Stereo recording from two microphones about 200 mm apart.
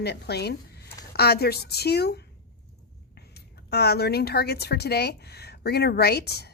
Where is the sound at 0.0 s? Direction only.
55° left (ahead or behind).